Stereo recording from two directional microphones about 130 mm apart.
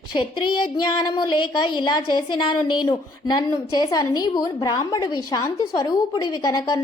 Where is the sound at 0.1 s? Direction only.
40° left (ahead or behind).